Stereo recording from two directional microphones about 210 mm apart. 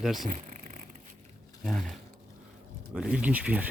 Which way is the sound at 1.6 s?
Centre (ahead or behind).